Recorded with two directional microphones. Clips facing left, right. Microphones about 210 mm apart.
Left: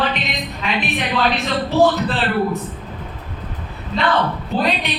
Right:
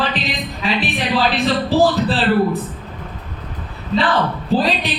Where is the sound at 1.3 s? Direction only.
35° right (ahead or behind).